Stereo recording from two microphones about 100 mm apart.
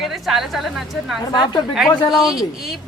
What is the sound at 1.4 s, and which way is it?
Speech, 50° left (ahead or behind).